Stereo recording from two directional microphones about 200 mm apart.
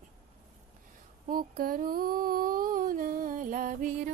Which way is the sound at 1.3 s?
45° right (ahead or behind).